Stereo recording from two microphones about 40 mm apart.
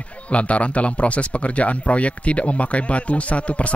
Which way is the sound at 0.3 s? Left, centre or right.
Left.